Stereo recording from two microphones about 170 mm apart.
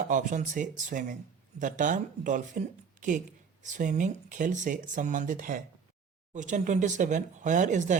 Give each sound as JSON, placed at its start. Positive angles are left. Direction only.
{"t": 0.1, "sound": "speech", "side_deg": -50}